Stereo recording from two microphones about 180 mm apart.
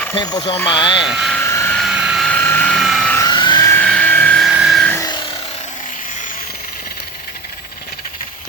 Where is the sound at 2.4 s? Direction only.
10° left (ahead or behind).